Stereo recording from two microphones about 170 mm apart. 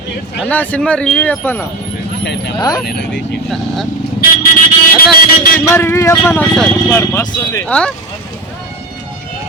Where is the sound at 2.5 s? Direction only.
25° left (ahead or behind).